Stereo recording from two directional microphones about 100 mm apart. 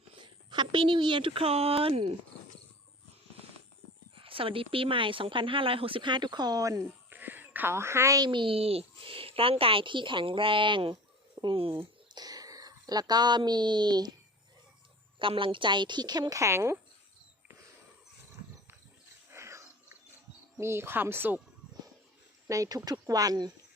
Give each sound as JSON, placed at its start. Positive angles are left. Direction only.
{"t": 0.5, "sound": "a woman's voice", "side_deg": -50}
{"t": 4.2, "sound": "a woman's voice", "side_deg": -65}
{"t": 7.1, "sound": "a sound", "side_deg": -20}
{"t": 8.3, "sound": "a woman's voice", "side_deg": -60}
{"t": 12.1, "sound": "speech", "side_deg": -40}
{"t": 15.2, "sound": "a woman's voice", "side_deg": -60}
{"t": 19.3, "sound": "a sound", "side_deg": -30}
{"t": 20.6, "sound": "speech", "side_deg": -25}
{"t": 22.4, "sound": "speech", "side_deg": -35}